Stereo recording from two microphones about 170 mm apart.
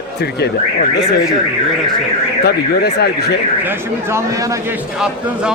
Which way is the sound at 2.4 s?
75° left (ahead or behind).